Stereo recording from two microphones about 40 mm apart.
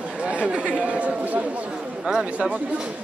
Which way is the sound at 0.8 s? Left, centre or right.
Right.